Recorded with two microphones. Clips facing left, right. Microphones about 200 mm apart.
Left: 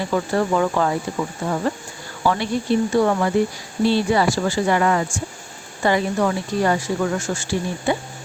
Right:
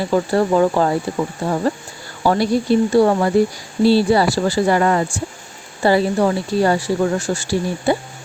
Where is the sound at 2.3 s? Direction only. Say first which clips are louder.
Right 4 dB; 35° right (ahead or behind).